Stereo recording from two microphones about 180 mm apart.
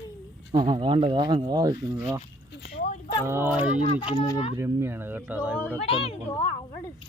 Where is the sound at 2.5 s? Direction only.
70° left (ahead or behind).